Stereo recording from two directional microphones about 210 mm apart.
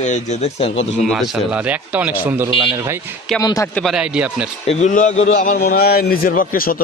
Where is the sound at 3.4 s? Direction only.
20° left (ahead or behind).